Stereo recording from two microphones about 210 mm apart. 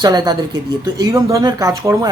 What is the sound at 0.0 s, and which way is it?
Speech, 20° right (ahead or behind).